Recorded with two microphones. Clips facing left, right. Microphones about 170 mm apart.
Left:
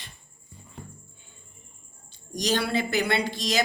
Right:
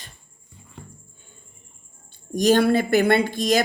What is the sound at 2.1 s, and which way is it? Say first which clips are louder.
Speech: right 9 dB; 50° right (ahead or behind).